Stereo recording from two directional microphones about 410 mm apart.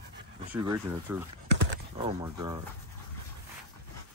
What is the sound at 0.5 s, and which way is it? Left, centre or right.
Speech, centre.